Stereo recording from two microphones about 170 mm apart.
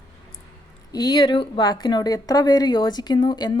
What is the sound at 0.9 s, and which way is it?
Speech, 25° left (ahead or behind).